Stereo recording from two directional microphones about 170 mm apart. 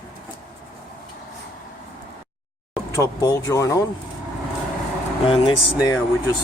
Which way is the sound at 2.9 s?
20° left (ahead or behind).